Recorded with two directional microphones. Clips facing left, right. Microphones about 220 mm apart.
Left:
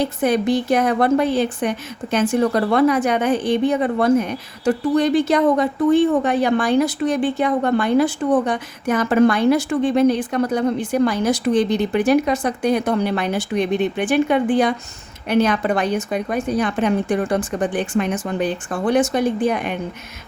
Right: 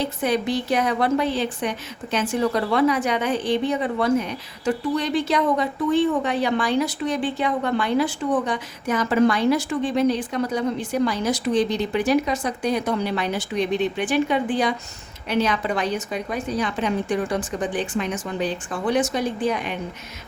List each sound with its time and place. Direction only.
0.2 s a woman's voice: 50° left (ahead or behind)